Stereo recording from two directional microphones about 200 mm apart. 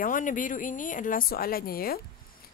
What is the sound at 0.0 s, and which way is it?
A woman's voice, 40° left (ahead or behind).